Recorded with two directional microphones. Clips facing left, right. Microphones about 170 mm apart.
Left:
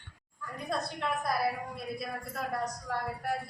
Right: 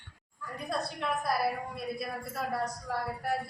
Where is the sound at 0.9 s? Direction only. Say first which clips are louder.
Right 2 dB; centre (ahead or behind).